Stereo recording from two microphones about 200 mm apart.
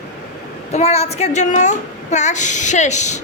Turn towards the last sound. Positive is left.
turn(degrees=35)  # may be behind; listen again after turning